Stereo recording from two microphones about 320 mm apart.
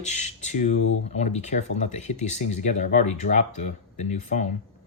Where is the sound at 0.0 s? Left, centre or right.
Left.